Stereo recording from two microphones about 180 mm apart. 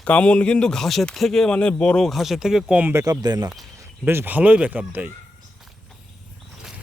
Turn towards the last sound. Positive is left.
turn(degrees=-10)  # may be behind; listen again after turning